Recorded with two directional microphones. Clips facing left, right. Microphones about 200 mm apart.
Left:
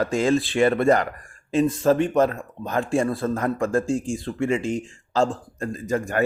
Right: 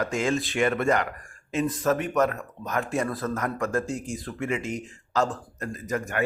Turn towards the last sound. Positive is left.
turn(degrees=30)  # may be behind; listen again after turning